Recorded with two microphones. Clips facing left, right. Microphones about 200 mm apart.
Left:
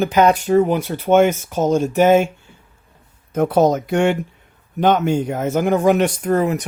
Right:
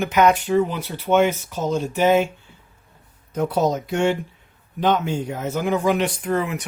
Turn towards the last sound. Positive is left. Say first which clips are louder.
# left 5 dB
turn(degrees=40)  # may be behind; listen again after turning